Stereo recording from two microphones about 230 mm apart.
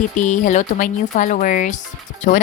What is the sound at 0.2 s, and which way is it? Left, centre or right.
Speech, left.